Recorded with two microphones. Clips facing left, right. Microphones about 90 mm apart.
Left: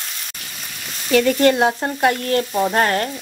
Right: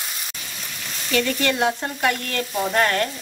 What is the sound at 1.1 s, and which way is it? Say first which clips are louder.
Frying: left 7 dB; 40° left (ahead or behind).